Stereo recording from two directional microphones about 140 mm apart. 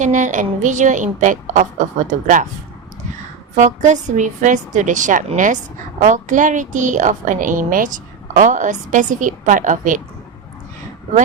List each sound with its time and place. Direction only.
0.0 s a woman's voice: 65° right (ahead or behind)
3.5 s a woman's voice: 60° right (ahead or behind)